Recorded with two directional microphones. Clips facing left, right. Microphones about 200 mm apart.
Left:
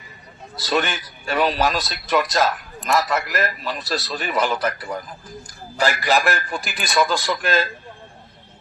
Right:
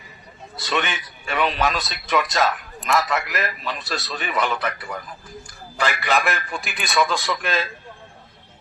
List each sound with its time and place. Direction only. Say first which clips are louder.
0.5 s a man's voice: left 3 dB; centre (ahead or behind)
5.5 s a sound: left 3 dB; 40° left (ahead or behind)
6.0 s a man's voice: left 2 dB; centre (ahead or behind)